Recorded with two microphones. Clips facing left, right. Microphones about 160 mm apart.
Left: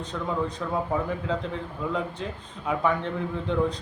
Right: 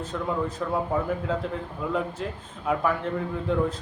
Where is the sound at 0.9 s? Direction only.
5° right (ahead or behind).